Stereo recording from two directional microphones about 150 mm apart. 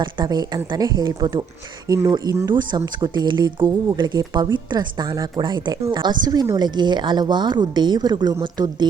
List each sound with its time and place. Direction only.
0.0 s speech: 30° right (ahead or behind)